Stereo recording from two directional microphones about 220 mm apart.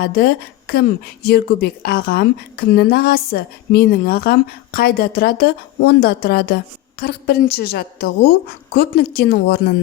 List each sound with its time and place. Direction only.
0.0 s speech: 45° left (ahead or behind)